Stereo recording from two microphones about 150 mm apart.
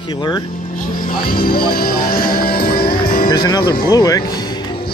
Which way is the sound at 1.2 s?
80° left.